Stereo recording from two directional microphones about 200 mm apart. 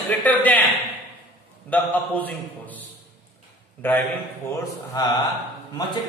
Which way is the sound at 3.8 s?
10° left (ahead or behind).